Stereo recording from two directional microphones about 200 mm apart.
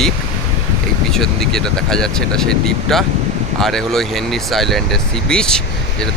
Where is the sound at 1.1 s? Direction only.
Centre (ahead or behind).